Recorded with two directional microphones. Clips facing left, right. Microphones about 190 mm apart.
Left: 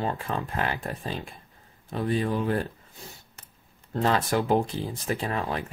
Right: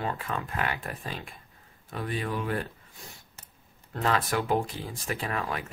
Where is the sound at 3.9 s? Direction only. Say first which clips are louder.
Left 3 dB; 25° left (ahead or behind).